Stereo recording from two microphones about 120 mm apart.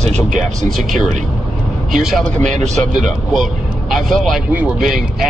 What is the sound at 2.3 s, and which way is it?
Speech, 80° right.